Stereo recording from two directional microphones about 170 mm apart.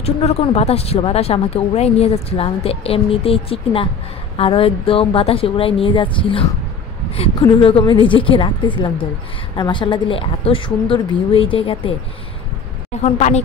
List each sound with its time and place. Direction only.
0.0 s a woman's voice: 35° left (ahead or behind)
13.0 s speech: 40° left (ahead or behind)